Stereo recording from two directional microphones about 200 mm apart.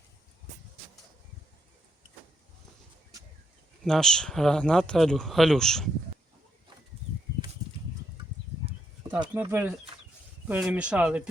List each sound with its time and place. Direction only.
3.8 s speech: 5° left (ahead or behind)
8.6 s a sound: 20° right (ahead or behind)
9.3 s speech: 10° right (ahead or behind)